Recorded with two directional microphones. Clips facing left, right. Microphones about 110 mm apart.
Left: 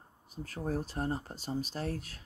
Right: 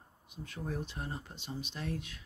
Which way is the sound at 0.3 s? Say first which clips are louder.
Left 5 dB; 40° left (ahead or behind).